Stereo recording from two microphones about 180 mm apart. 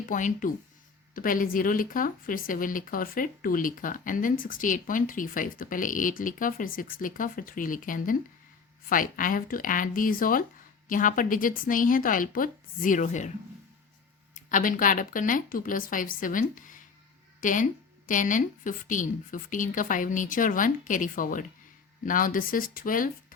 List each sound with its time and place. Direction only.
0.1 s speech: 45° left (ahead or behind)
14.3 s speech: 45° left (ahead or behind)